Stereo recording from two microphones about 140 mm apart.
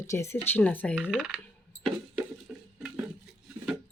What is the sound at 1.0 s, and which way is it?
Speech, 5° right (ahead or behind).